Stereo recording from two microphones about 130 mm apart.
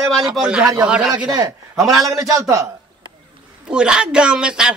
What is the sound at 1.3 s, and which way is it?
A man's voice, 25° right (ahead or behind).